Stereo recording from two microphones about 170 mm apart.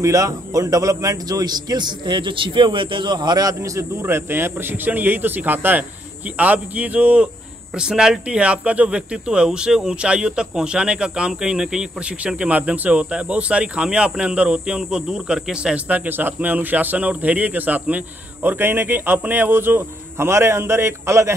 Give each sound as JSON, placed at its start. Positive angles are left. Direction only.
{"t": 0.0, "sound": "a man's voice", "side_deg": -20}